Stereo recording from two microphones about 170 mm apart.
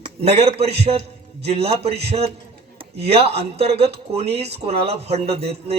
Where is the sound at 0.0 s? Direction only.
35° right (ahead or behind).